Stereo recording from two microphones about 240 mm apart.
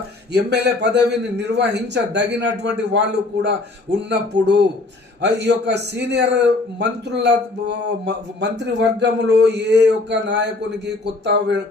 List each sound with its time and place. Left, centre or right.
0.3 s a man's voice: right